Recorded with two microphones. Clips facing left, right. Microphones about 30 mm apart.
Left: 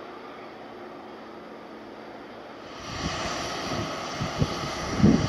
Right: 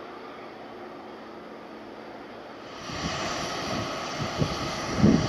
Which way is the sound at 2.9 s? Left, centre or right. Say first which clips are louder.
Even; centre.